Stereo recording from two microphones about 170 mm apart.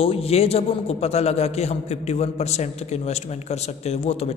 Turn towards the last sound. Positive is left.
turn(degrees=35)  # may be behind; listen again after turning